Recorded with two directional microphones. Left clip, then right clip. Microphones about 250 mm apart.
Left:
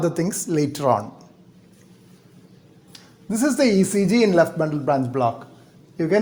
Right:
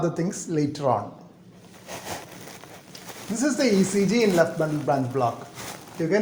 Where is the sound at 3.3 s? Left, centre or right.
Left.